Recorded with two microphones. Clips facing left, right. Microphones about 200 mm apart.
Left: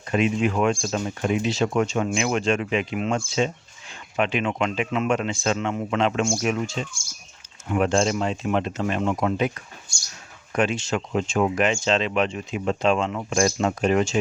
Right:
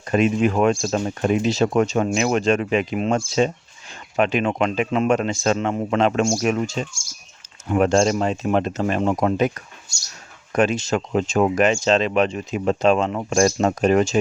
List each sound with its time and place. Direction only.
0.0 s speech: 45° right (ahead or behind)